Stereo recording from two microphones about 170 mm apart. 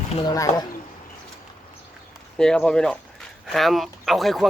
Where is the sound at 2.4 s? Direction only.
5° left (ahead or behind).